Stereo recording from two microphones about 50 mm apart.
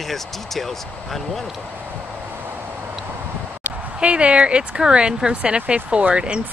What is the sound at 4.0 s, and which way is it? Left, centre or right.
Speech, right.